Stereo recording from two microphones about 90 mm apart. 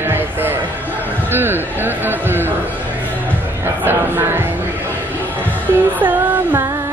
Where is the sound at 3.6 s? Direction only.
25° right (ahead or behind).